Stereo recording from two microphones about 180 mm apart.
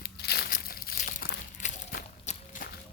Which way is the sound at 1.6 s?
40° left (ahead or behind).